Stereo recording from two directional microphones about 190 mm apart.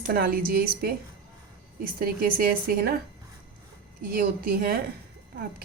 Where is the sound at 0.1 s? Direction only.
50° right (ahead or behind).